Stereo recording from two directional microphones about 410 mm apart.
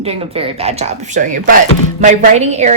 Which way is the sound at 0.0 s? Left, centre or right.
Centre.